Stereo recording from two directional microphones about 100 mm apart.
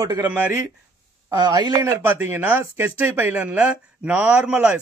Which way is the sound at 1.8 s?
20° right (ahead or behind).